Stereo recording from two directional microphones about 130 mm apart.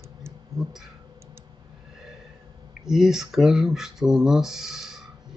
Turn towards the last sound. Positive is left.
turn(degrees=-5)  # may be behind; listen again after turning